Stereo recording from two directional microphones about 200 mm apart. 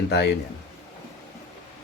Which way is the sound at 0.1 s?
55° left (ahead or behind).